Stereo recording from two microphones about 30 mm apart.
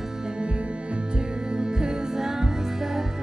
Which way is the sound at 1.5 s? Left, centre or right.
Right.